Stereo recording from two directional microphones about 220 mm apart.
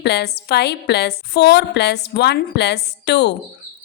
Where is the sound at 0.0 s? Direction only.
50° left (ahead or behind).